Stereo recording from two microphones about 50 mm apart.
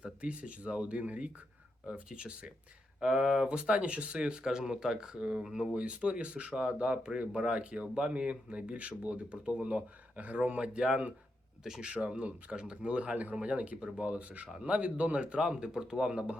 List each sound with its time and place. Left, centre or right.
0.0 s speech: right